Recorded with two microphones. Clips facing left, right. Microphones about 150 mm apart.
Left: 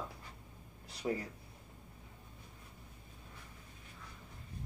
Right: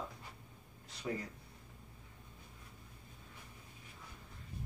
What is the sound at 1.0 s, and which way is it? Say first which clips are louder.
Speech: left 4 dB; 30° left (ahead or behind).